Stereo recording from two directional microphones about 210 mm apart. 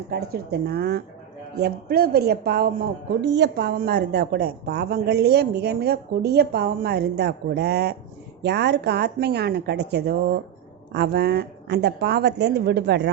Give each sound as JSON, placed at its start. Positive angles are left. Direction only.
{"t": 0.1, "sound": "a woman's voice", "side_deg": -50}